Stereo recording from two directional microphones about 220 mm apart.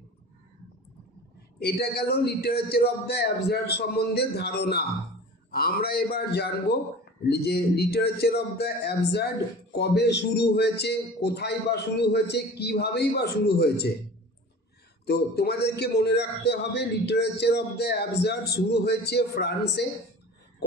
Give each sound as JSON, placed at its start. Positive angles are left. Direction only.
{"t": 1.6, "sound": "a man's voice", "side_deg": 45}
{"t": 15.0, "sound": "a man's voice", "side_deg": 45}